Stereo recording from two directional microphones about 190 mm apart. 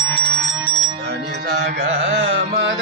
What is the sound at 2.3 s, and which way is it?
Carnatic music, 80° right.